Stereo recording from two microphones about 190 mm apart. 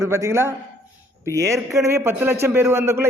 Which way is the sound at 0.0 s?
15° right (ahead or behind).